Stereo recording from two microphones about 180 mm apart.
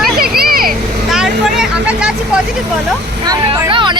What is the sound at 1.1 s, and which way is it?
Vehicle, centre (ahead or behind).